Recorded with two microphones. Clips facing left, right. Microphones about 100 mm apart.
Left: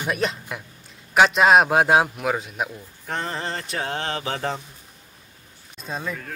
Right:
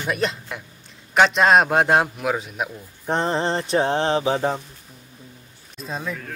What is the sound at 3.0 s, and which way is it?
Speech, 25° right (ahead or behind).